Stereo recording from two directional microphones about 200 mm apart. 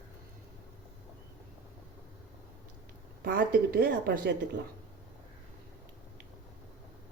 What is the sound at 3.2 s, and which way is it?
A woman's voice, 45° right (ahead or behind).